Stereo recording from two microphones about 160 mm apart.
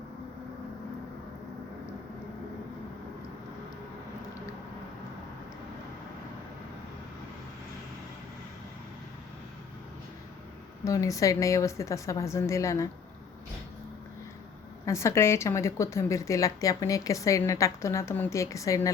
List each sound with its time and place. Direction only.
10.8 s speech: 20° left (ahead or behind)
14.8 s speech: 15° left (ahead or behind)